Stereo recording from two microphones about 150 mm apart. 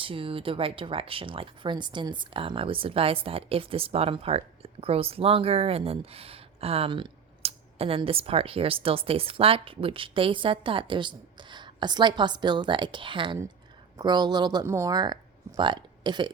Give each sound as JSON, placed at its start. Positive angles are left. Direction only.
{"t": 0.0, "sound": "speech", "side_deg": -35}